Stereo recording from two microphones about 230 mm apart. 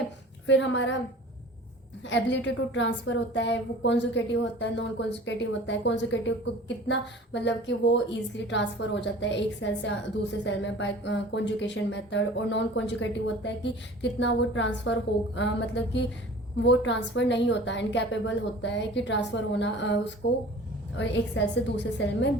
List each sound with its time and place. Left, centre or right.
0.4 s a woman's voice: left
2.0 s a woman's voice: left